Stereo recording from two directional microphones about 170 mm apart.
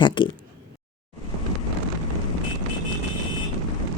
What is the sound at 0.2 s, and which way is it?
Speech, 30° left (ahead or behind).